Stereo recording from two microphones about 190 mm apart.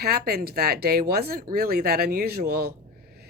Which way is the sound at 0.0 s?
55° right (ahead or behind).